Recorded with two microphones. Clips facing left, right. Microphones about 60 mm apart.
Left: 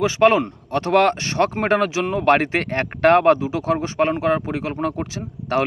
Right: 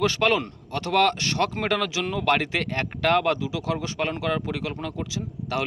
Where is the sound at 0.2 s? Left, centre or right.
Left.